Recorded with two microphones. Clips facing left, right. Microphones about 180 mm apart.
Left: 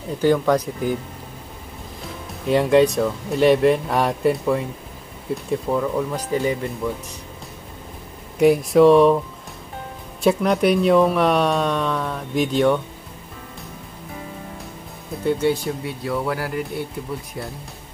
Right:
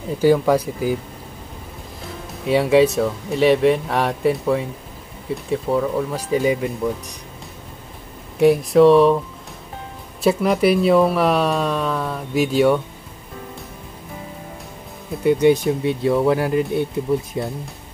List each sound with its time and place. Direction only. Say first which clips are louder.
0.2 s speech: right 2 dB; 10° right (ahead or behind)
2.4 s speech: right 1 dB; 5° right (ahead or behind)
8.4 s speech: right 1 dB; centre (ahead or behind)
10.2 s speech: right 1 dB; centre (ahead or behind)
15.2 s speech: right 5 dB; 15° right (ahead or behind)